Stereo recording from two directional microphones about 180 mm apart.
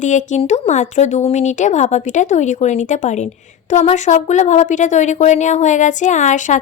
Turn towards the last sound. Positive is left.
turn(degrees=45)  # may be behind; listen again after turning